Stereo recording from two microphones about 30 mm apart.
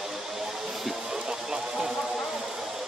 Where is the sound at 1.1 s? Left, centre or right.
Right.